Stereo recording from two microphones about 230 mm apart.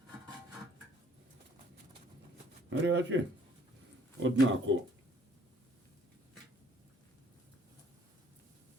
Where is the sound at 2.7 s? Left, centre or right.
Right.